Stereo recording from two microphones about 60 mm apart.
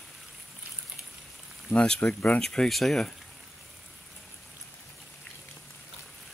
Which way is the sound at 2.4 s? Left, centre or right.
Centre.